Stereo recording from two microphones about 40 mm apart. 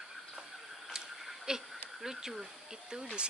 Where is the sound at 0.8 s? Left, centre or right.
Centre.